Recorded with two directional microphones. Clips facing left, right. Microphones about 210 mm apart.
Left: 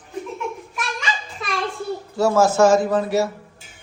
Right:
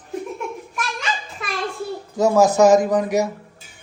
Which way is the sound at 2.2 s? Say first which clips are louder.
Right 1 dB; 15° right (ahead or behind).